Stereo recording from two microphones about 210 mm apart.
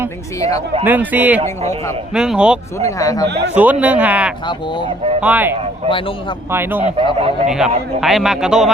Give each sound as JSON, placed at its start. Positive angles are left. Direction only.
{"t": 0.3, "sound": "speech", "side_deg": 15}
{"t": 0.9, "sound": "a man's voice", "side_deg": -10}
{"t": 2.7, "sound": "speech", "side_deg": 15}
{"t": 3.2, "sound": "a man's voice", "side_deg": -50}
{"t": 3.5, "sound": "a man's voice", "side_deg": -10}
{"t": 4.4, "sound": "speech", "side_deg": 20}
{"t": 5.2, "sound": "a man's voice", "side_deg": -10}
{"t": 5.9, "sound": "speech", "side_deg": 25}
{"t": 6.5, "sound": "a man's voice", "side_deg": -10}
{"t": 6.8, "sound": "speech", "side_deg": -25}
{"t": 8.0, "sound": "a man's voice", "side_deg": 0}